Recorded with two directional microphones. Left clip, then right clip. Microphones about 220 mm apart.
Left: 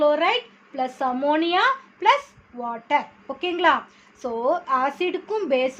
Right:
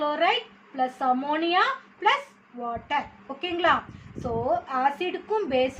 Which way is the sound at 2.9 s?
50° left (ahead or behind).